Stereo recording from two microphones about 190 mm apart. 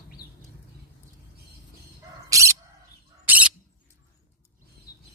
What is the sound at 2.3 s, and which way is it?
Bird, 15° right (ahead or behind).